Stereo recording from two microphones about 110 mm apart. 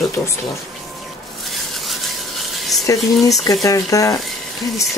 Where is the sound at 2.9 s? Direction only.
30° left (ahead or behind).